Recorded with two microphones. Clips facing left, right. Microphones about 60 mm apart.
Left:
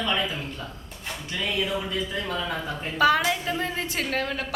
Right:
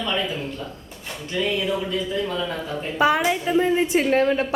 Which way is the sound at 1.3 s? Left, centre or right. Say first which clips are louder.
Right 4 dB; centre.